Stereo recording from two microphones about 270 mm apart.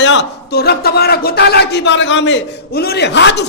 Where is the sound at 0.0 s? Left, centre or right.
Left.